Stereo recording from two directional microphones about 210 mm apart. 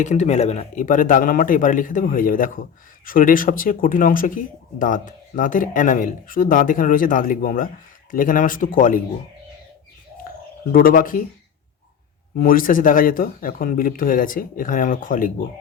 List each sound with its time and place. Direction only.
0.0 s speech: 35° left (ahead or behind)
10.7 s speech: 45° left (ahead or behind)
12.4 s speech: 40° left (ahead or behind)